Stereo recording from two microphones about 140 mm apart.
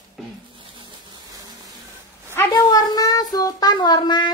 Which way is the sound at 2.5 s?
30° left (ahead or behind).